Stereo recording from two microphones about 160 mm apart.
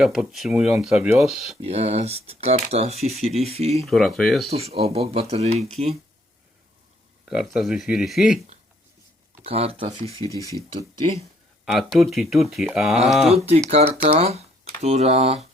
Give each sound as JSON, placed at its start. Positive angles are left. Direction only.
{"t": 0.0, "sound": "speech", "side_deg": 0}
{"t": 1.6, "sound": "speech", "side_deg": -40}
{"t": 3.8, "sound": "speech", "side_deg": 0}
{"t": 4.4, "sound": "speech", "side_deg": -40}
{"t": 7.3, "sound": "speech", "side_deg": 0}
{"t": 9.4, "sound": "speech", "side_deg": -35}
{"t": 11.6, "sound": "speech", "side_deg": 0}
{"t": 13.7, "sound": "speech", "side_deg": -40}